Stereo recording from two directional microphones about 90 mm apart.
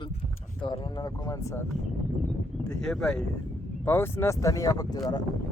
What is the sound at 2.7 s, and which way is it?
Speech, 5° left (ahead or behind).